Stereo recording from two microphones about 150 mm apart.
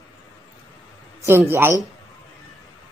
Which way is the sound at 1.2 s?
15° right (ahead or behind).